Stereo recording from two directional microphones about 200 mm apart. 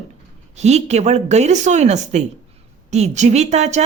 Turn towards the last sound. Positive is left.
turn(degrees=-35)  # may be behind; listen again after turning